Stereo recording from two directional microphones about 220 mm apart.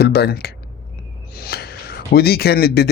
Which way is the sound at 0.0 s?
45° left (ahead or behind).